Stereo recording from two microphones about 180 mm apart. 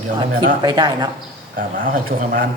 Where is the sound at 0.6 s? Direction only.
25° right (ahead or behind).